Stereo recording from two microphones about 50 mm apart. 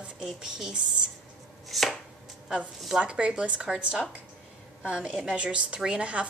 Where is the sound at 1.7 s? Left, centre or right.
Centre.